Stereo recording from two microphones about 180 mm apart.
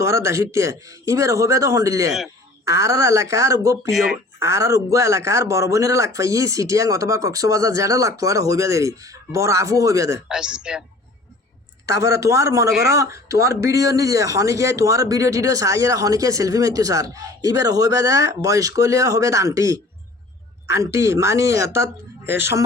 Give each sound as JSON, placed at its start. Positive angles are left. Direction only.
{"t": 0.0, "sound": "speech", "side_deg": -15}
{"t": 3.9, "sound": "speech", "side_deg": 0}
{"t": 4.4, "sound": "speech", "side_deg": -15}
{"t": 10.2, "sound": "speech", "side_deg": -5}
{"t": 11.9, "sound": "speech", "side_deg": -15}